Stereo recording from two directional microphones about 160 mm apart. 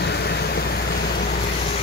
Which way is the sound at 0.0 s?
90° left.